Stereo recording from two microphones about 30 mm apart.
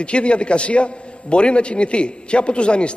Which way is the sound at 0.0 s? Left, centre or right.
Left.